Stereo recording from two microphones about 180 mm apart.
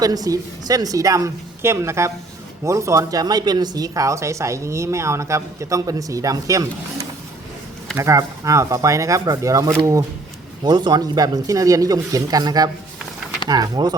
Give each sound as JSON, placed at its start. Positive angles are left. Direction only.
{"t": 0.0, "sound": "speech", "side_deg": -20}
{"t": 7.9, "sound": "speech", "side_deg": -15}